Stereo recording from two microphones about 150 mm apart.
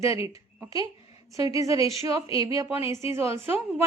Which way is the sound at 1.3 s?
20° right (ahead or behind).